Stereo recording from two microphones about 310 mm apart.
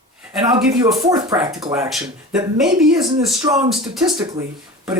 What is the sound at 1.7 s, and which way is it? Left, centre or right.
Speech, centre.